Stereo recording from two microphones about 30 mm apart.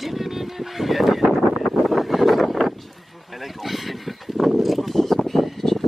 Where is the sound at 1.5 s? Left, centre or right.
Centre.